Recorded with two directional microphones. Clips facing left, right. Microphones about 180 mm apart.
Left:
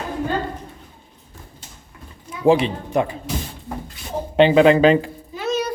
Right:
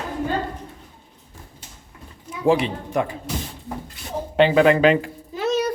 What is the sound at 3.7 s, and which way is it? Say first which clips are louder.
Beatboxing: left 1 dB; 5° right (ahead or behind).